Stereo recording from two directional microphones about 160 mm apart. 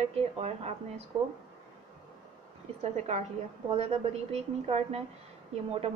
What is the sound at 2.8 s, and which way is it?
A woman's voice, 45° right (ahead or behind).